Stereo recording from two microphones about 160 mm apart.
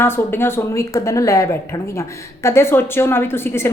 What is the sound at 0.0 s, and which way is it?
A woman's voice, 15° left (ahead or behind).